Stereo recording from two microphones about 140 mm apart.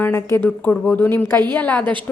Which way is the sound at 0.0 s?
20° left (ahead or behind).